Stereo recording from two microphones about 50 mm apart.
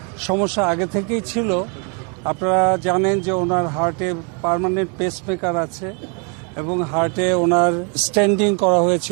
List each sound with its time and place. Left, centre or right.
0.2 s speech: centre